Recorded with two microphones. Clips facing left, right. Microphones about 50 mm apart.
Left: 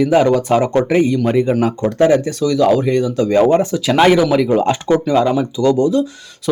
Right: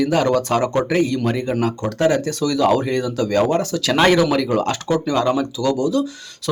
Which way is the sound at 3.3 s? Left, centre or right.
Left.